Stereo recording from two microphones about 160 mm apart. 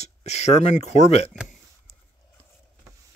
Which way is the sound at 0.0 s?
45° left (ahead or behind).